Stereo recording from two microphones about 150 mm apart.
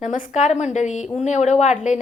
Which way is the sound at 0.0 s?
55° left (ahead or behind).